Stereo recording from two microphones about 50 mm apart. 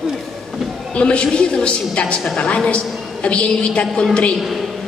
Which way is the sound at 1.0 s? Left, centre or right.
Left.